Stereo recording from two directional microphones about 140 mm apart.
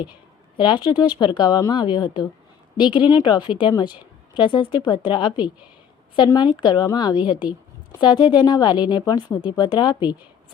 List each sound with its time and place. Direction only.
0.5 s a woman's voice: 35° left (ahead or behind)